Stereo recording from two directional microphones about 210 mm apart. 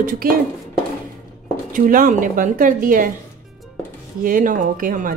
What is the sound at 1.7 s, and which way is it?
Speech, 40° right (ahead or behind).